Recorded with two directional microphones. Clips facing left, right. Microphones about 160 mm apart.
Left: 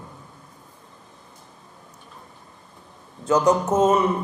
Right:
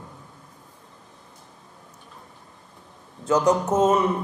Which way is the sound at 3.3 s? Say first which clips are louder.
Left 1 dB; 15° left (ahead or behind).